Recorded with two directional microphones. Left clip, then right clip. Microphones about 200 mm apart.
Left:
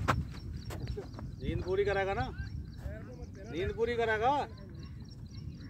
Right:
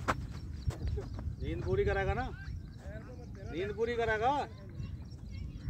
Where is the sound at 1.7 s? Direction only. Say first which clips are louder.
Left 2 dB; 15° left (ahead or behind).